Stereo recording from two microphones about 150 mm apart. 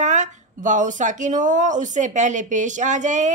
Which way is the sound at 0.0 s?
55° right (ahead or behind).